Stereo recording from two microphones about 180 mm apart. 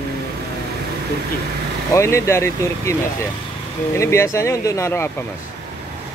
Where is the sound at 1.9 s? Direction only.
15° left (ahead or behind).